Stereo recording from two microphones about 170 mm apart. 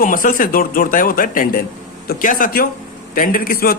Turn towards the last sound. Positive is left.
turn(degrees=55)  # may be behind; listen again after turning